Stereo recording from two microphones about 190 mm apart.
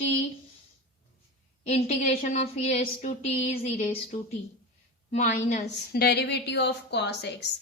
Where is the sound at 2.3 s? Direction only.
35° left (ahead or behind).